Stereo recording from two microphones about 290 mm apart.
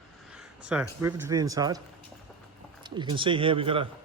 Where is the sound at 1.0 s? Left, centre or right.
Centre.